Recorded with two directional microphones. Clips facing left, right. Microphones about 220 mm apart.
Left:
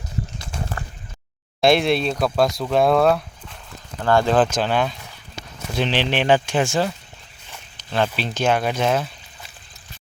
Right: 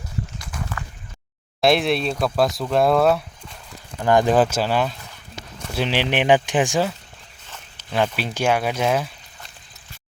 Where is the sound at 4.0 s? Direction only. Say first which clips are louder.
Right 1 dB; 15° right (ahead or behind).